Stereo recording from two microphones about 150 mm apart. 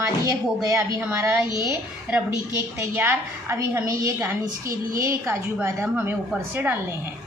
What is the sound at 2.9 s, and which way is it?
A woman's voice, 15° right (ahead or behind).